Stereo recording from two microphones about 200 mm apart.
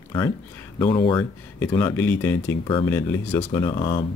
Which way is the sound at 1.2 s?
15° left (ahead or behind).